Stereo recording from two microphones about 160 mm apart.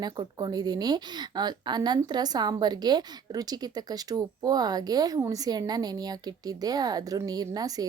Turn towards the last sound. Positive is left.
turn(degrees=-25)  # may be behind; listen again after turning